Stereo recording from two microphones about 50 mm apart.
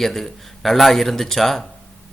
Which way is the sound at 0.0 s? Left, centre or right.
Centre.